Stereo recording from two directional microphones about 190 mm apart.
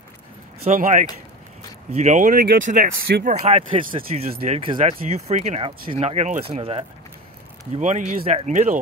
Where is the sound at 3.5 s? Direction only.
30° right (ahead or behind).